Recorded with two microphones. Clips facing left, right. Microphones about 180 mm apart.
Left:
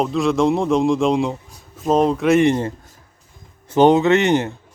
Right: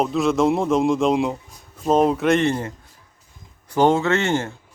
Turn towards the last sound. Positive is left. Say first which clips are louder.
# left 5 dB
turn(degrees=20)  # may be behind; listen again after turning